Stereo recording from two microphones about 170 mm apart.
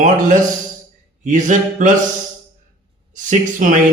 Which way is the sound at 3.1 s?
50° right (ahead or behind).